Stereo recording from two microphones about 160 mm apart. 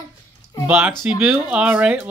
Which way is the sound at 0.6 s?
10° right (ahead or behind).